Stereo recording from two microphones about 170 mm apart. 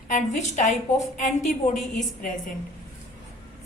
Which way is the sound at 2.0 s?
50° left (ahead or behind).